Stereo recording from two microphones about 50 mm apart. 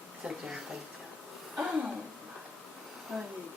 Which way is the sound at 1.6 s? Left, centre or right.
Right.